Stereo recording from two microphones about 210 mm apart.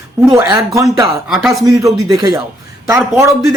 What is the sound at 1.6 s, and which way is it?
A man's voice, 15° right (ahead or behind).